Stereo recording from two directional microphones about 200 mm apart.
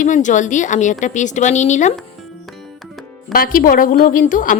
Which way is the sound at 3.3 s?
45° left (ahead or behind).